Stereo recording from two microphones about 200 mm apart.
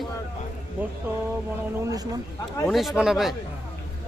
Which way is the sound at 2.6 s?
Centre (ahead or behind).